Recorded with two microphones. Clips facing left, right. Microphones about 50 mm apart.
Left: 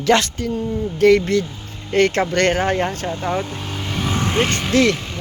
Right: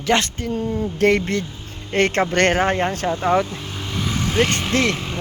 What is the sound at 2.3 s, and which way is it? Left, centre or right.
Speech, right.